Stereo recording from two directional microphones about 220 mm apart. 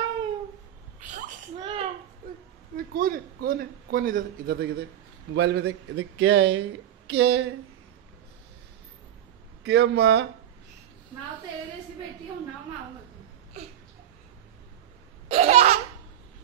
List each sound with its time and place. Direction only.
1.6 s a sound: 25° right (ahead or behind)
2.7 s a man's voice: 40° right (ahead or behind)
5.6 s speech: 80° right; by 7.4 s 50° right (ahead or behind)
9.6 s speech: 50° right (ahead or behind)
15.2 s laughter: 30° right (ahead or behind)